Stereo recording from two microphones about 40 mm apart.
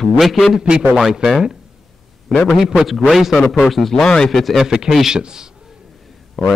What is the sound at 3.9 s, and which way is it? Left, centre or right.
Speech, centre.